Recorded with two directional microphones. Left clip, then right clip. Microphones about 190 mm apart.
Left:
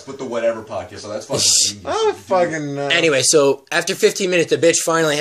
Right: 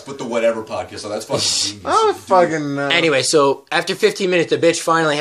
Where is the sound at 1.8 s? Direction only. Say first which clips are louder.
Right 3 dB; 45° right (ahead or behind).